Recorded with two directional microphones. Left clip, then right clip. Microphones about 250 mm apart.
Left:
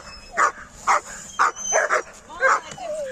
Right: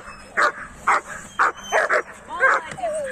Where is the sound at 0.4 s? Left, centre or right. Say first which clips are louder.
Right 1 dB; left.